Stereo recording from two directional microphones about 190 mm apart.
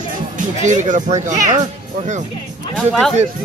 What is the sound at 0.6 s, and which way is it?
Speech, 40° right (ahead or behind).